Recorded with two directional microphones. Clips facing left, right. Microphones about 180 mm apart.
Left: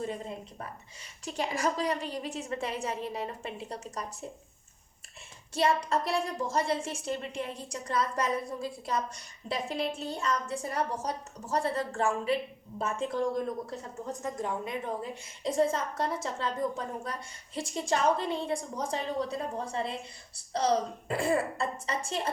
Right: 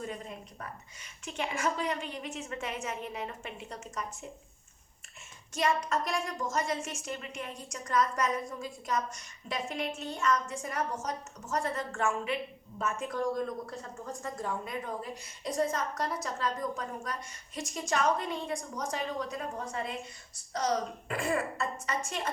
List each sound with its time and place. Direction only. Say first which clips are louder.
0.0 s a woman's voice: left 4 dB; 30° left (ahead or behind)
5.5 s a woman's voice: left 2 dB; 30° left (ahead or behind)